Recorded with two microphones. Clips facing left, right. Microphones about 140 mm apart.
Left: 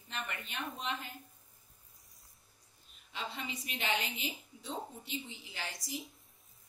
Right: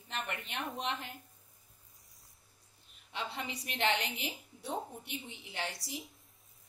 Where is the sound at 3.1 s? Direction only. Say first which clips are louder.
Right 2 dB; 65° right (ahead or behind).